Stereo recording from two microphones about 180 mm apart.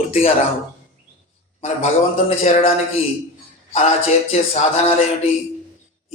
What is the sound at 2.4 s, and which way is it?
Speech, 35° left (ahead or behind).